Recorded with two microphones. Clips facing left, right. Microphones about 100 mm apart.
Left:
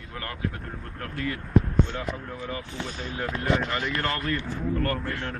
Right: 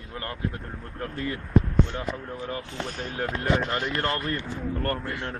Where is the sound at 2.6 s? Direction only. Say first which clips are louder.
Right 1 dB; 75° right (ahead or behind).